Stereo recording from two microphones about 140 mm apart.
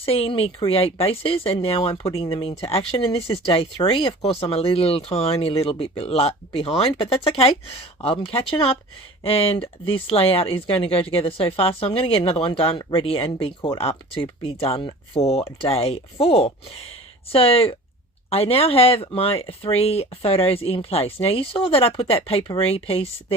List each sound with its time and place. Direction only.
0.0 s speech: 45° left (ahead or behind)